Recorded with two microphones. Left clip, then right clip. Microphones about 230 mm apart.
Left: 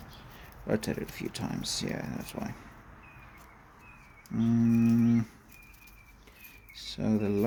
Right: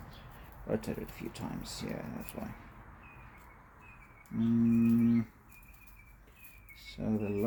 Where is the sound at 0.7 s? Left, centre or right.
Left.